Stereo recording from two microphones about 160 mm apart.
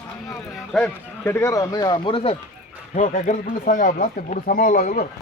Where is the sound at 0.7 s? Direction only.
Centre (ahead or behind).